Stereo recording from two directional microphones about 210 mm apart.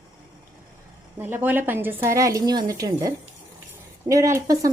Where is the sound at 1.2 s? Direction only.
10° right (ahead or behind).